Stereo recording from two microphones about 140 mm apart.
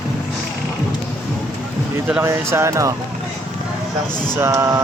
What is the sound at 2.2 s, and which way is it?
Speech, 20° right (ahead or behind).